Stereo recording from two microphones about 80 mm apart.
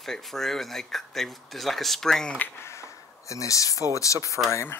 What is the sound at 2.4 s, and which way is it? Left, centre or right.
Speech, left.